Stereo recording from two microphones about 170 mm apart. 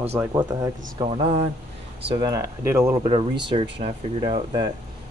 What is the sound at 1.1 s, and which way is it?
Speech, 35° right (ahead or behind).